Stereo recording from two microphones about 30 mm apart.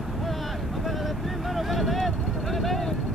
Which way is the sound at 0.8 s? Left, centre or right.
Centre.